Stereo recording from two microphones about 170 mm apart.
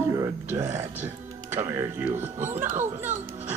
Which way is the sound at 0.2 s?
15° right (ahead or behind).